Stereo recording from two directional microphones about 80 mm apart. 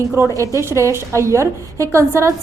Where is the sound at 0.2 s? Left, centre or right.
Right.